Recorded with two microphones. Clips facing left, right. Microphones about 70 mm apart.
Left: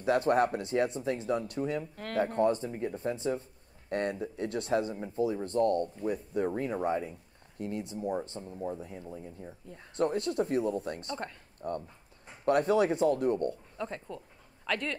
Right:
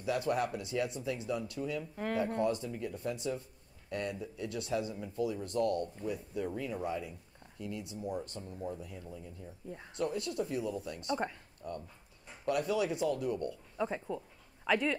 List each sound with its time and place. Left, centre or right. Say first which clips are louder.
0.0 s speech: left 7 dB; left
11.1 s speech: right 3 dB; centre
11.6 s speech: left 6 dB; left
13.7 s speech: right 3 dB; centre